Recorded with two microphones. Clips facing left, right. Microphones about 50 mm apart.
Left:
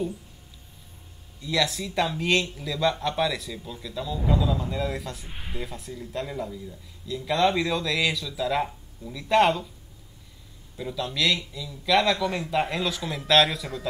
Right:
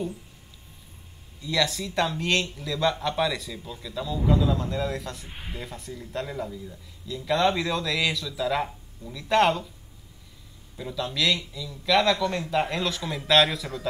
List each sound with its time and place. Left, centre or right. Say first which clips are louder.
1.4 s speech: even; centre
10.8 s speech: even; centre